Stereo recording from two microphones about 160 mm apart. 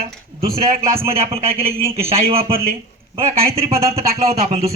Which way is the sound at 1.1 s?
40° right (ahead or behind).